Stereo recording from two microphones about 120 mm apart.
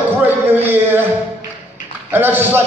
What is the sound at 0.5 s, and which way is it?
Speech, 15° right (ahead or behind).